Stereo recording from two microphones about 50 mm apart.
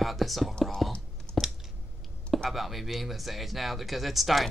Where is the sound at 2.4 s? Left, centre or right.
Centre.